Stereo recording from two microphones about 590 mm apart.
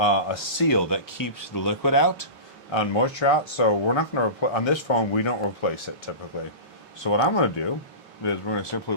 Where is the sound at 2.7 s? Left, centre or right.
Left.